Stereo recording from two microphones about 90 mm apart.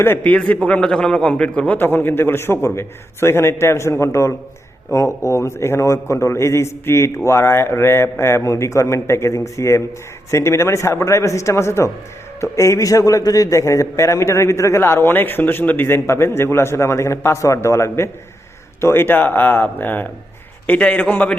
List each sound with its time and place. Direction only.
0.2 s a man's voice: 15° left (ahead or behind)